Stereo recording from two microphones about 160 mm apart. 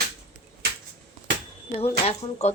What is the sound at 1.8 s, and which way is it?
Speech, 40° left (ahead or behind).